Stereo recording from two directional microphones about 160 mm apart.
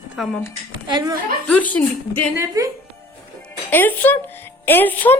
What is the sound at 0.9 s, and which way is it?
Speech, 25° right (ahead or behind).